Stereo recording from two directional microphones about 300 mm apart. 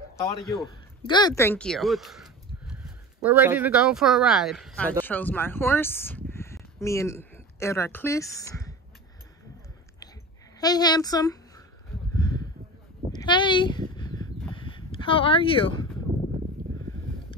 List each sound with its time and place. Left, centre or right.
0.5 s speech: centre
10.6 s a woman's voice: centre
12.2 s a sound: centre